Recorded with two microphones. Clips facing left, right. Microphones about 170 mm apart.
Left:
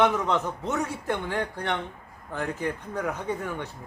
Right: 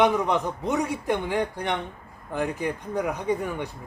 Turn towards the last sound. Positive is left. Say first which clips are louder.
# right 4 dB
turn(degrees=-15)  # may be behind; listen again after turning